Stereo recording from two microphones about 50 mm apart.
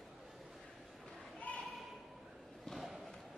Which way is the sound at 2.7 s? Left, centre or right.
Centre.